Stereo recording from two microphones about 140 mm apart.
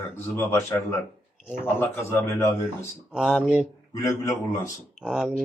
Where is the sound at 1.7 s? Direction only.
20° left (ahead or behind).